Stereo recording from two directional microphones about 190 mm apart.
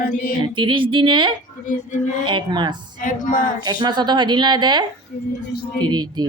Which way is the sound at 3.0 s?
45° left (ahead or behind).